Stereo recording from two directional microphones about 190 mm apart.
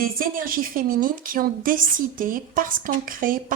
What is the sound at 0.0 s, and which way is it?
A woman's voice, 50° right (ahead or behind).